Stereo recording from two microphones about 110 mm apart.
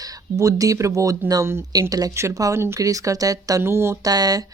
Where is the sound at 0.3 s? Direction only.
30° right (ahead or behind).